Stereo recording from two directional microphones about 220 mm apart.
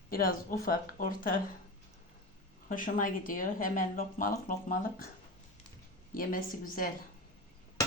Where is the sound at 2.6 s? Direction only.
40° left (ahead or behind).